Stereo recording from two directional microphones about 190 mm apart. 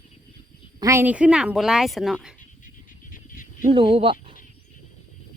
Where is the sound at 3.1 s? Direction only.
45° left (ahead or behind).